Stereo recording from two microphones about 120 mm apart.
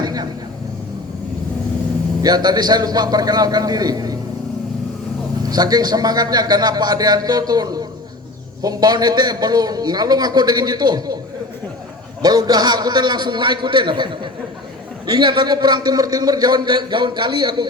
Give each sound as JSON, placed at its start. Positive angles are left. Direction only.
{"t": 0.0, "sound": "a sound", "side_deg": -35}
{"t": 2.2, "sound": "a man's voice", "side_deg": -35}
{"t": 5.5, "sound": "a man's voice", "side_deg": -35}
{"t": 12.2, "sound": "a man's voice", "side_deg": -35}